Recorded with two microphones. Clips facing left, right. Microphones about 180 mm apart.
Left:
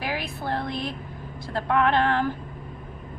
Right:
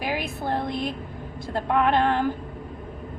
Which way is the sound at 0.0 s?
15° right (ahead or behind).